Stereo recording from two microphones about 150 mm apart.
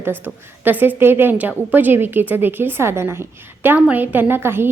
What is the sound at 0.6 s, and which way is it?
A woman's voice, 10° right (ahead or behind).